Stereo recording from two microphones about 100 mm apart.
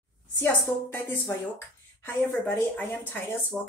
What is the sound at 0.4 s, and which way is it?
Speech, 20° left (ahead or behind).